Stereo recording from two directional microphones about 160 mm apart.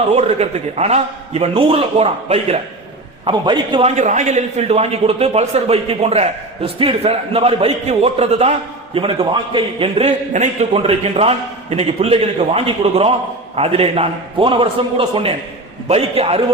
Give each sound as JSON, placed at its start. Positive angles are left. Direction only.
{"t": 0.1, "sound": "a man's voice", "side_deg": -40}
{"t": 3.9, "sound": "a man's voice", "side_deg": -50}